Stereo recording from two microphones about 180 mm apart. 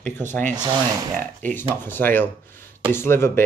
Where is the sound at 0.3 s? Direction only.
10° left (ahead or behind).